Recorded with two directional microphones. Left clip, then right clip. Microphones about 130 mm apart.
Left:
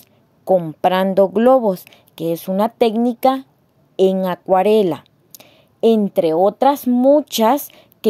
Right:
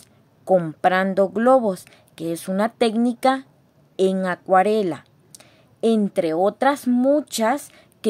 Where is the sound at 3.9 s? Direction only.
30° left (ahead or behind).